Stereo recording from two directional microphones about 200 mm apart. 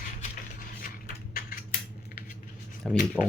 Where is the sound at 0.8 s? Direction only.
45° left (ahead or behind).